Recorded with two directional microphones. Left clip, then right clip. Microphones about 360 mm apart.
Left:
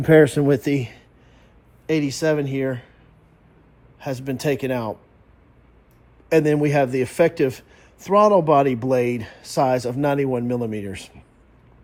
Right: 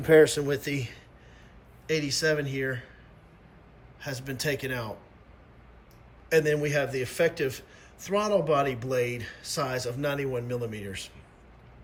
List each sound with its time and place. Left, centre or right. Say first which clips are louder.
0.1 s a man's voice: left 5 dB; centre
4.0 s a man's voice: left 7 dB; centre
6.2 s a man's voice: left 6 dB; centre